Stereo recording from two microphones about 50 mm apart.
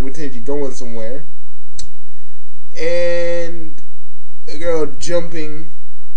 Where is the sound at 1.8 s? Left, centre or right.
Centre.